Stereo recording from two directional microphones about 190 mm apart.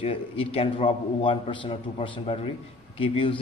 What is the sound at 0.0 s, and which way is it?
A man's voice, 30° left (ahead or behind).